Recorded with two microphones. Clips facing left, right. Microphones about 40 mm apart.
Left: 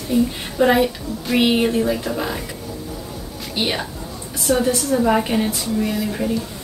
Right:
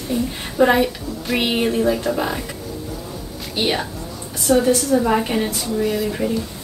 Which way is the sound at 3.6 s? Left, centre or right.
Centre.